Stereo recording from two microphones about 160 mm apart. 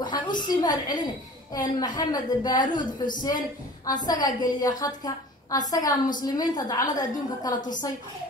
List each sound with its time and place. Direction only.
0.0 s a woman's voice: 25° left (ahead or behind)